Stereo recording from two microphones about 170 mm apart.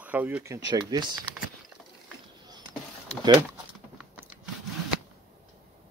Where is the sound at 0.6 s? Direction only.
25° right (ahead or behind).